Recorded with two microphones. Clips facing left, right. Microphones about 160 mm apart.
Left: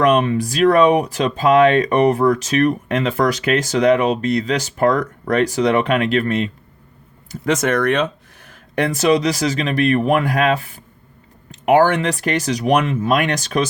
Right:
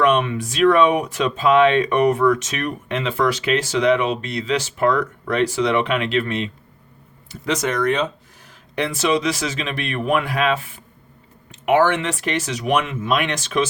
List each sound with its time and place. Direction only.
0.0 s speech: 35° left (ahead or behind); by 8.0 s 60° left (ahead or behind)
8.4 s speech: 50° left (ahead or behind)
11.6 s speech: 40° left (ahead or behind)